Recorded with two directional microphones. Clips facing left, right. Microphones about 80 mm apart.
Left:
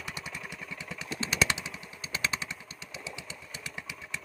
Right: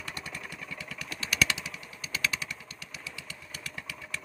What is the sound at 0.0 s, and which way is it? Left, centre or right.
Vehicle, centre.